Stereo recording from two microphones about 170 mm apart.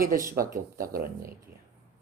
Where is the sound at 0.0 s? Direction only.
55° right (ahead or behind).